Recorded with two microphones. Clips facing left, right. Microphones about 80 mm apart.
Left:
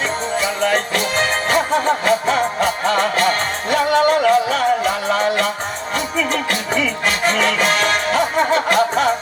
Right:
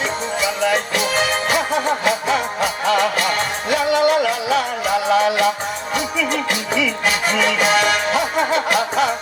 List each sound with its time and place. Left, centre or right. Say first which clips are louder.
0.3 s music: left 1 dB; left
7.8 s music: even; left